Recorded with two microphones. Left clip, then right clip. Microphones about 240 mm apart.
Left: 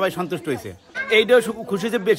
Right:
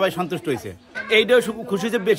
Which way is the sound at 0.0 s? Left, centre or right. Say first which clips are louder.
Right 1 dB; centre.